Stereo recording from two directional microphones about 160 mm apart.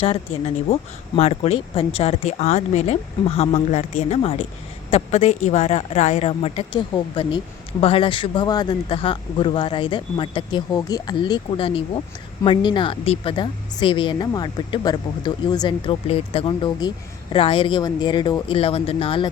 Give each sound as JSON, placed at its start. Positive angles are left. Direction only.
{"t": 0.0, "sound": "a woman's voice", "side_deg": 35}
{"t": 16.0, "sound": "a woman's voice", "side_deg": 40}